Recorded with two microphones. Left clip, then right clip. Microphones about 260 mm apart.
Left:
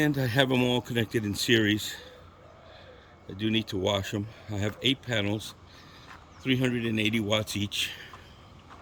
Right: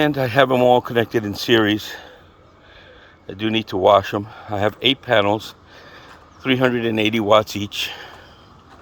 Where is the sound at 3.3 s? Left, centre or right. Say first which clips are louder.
Right 7 dB; centre.